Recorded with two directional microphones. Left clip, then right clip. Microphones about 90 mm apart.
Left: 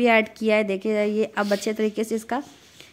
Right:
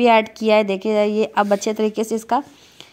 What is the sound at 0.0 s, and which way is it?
A woman's voice, 20° right (ahead or behind).